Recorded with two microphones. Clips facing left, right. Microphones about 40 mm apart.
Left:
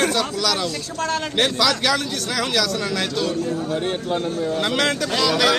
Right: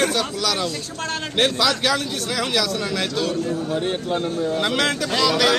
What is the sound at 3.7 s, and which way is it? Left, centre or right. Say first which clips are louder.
Speech: even; centre.